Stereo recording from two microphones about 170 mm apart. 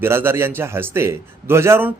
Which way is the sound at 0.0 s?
15° right (ahead or behind).